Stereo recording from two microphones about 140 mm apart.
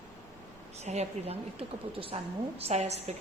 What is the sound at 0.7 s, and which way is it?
A woman's voice, 55° right (ahead or behind).